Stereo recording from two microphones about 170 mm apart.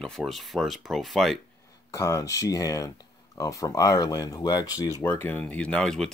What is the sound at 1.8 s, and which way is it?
Speech, 20° left (ahead or behind).